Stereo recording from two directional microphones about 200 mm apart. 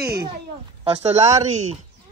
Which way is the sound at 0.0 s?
50° right (ahead or behind).